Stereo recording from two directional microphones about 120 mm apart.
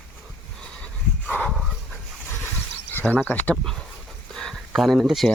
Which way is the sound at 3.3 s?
5° left (ahead or behind).